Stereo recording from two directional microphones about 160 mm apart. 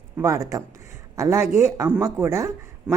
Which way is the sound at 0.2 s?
20° right (ahead or behind).